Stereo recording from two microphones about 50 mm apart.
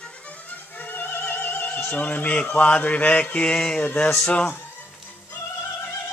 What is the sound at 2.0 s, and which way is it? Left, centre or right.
Speech, left.